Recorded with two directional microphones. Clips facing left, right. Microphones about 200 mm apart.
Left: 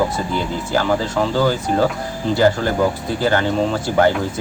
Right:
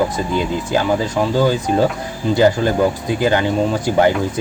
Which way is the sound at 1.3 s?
20° right (ahead or behind).